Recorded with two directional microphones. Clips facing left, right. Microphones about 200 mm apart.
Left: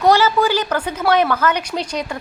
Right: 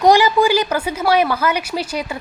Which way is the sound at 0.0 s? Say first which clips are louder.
Right 2 dB; 15° right (ahead or behind).